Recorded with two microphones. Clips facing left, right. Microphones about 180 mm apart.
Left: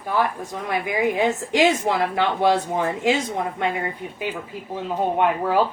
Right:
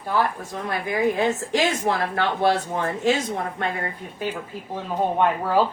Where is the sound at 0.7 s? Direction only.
15° left (ahead or behind).